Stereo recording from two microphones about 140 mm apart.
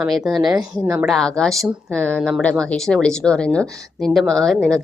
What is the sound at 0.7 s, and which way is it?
Speech, 25° right (ahead or behind).